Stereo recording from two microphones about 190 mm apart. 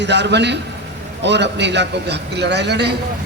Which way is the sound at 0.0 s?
65° right (ahead or behind).